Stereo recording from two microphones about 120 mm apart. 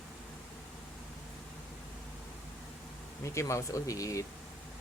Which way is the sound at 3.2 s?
25° left (ahead or behind).